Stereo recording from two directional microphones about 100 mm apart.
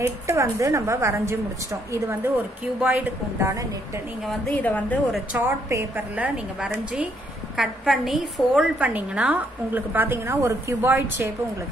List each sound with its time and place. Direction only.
0.0 s a woman's voice: 30° right (ahead or behind)
2.8 s a woman's voice: 15° right (ahead or behind)
3.3 s a woman's voice: 30° right (ahead or behind)
4.5 s a woman's voice: 15° left (ahead or behind)
5.3 s a woman's voice: 20° right (ahead or behind); by 8.6 s 5° right (ahead or behind)
8.7 s a woman's voice: 15° right (ahead or behind)